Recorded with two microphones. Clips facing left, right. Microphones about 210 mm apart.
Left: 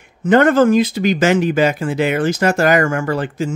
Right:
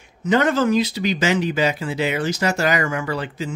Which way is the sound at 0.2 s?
55° left (ahead or behind).